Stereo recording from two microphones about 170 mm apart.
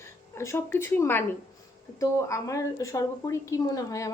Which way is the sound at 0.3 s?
15° left (ahead or behind).